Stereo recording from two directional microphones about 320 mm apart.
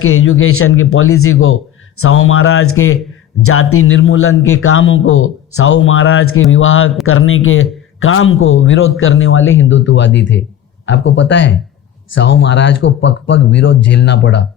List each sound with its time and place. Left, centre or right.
0.0 s a man's voice: left